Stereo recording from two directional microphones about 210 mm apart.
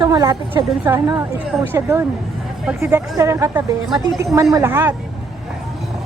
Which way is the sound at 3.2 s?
15° right (ahead or behind).